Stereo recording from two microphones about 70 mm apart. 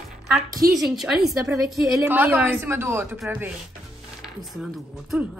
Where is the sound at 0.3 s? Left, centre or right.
Centre.